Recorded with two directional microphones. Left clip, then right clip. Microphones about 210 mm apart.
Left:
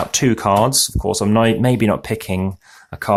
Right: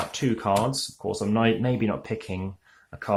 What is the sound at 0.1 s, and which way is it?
Speech, 35° left (ahead or behind).